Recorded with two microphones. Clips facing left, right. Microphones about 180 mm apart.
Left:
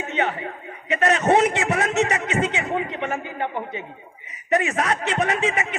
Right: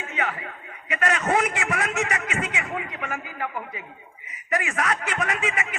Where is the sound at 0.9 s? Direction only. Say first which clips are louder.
Left 5 dB; 25° left (ahead or behind).